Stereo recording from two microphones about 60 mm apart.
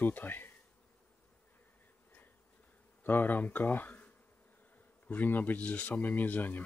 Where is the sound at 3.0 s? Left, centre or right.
Left.